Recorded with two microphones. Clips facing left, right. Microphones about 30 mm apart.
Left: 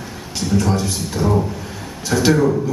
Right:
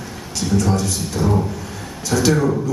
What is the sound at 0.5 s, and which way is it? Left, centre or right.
Speech, centre.